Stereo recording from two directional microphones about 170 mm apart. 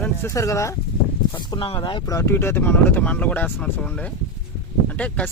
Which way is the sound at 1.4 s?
30° left (ahead or behind).